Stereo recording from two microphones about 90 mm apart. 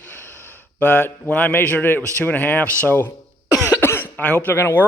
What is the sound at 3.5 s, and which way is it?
Cough, 30° left (ahead or behind).